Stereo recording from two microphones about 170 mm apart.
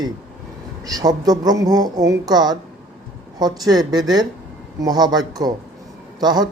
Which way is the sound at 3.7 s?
25° right (ahead or behind).